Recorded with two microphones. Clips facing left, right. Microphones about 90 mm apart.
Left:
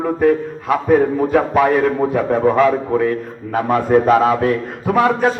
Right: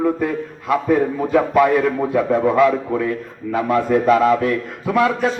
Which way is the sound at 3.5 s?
45° left (ahead or behind).